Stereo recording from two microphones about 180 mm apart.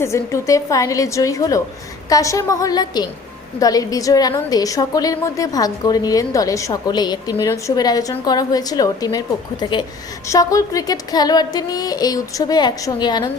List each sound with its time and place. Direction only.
0.0 s a woman's voice: 15° left (ahead or behind)